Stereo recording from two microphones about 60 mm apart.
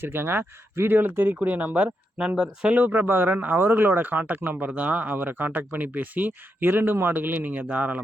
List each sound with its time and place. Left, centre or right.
0.0 s speech: right
1.5 s speech: right
2.7 s speech: right